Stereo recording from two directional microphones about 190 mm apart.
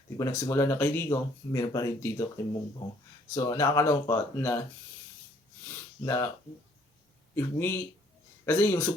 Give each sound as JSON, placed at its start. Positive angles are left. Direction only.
{"t": 0.2, "sound": "speech", "side_deg": 15}
{"t": 3.3, "sound": "speech", "side_deg": 15}
{"t": 5.6, "sound": "a sound", "side_deg": 15}
{"t": 7.3, "sound": "speech", "side_deg": 10}